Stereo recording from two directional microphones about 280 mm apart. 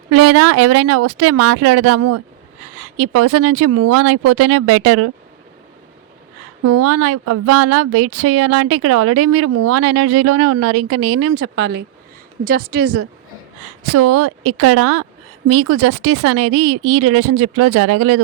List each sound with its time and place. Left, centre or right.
0.1 s speech: right
6.7 s speech: right
11.3 s speech: right
13.9 s speech: right